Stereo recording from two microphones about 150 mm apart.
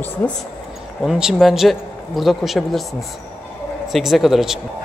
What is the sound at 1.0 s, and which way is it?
Speech, 5° right (ahead or behind).